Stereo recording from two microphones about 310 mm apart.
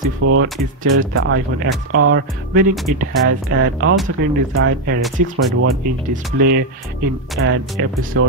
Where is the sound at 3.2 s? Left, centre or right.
Right.